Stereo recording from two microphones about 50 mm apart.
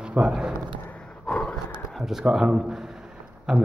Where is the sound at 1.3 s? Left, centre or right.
Left.